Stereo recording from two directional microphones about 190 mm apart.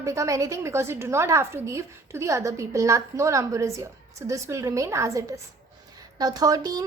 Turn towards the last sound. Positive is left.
turn(degrees=-20)  # may be behind; listen again after turning